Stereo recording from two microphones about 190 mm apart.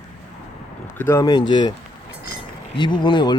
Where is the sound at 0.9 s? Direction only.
15° left (ahead or behind).